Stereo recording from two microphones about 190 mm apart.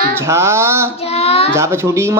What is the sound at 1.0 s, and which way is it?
Child singing, 30° left (ahead or behind).